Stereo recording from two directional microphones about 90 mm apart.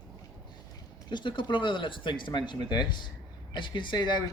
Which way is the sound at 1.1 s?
60° left (ahead or behind).